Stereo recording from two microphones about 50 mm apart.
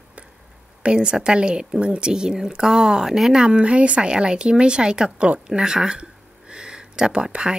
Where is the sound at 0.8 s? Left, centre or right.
Centre.